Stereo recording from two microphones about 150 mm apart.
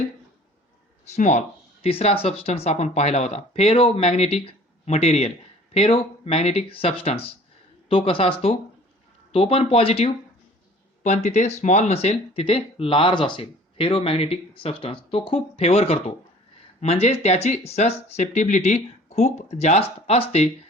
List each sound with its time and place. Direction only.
1.0 s speech: 50° left (ahead or behind)